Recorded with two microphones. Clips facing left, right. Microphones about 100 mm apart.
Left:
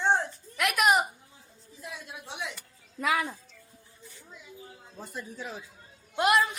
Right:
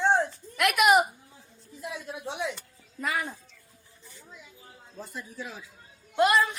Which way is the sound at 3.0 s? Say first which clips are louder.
Left 3 dB; 90° left.